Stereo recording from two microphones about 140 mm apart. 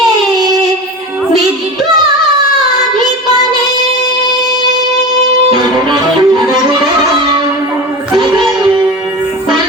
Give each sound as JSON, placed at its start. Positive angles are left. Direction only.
{"t": 5.5, "sound": "music", "side_deg": -30}
{"t": 8.1, "sound": "music", "side_deg": -30}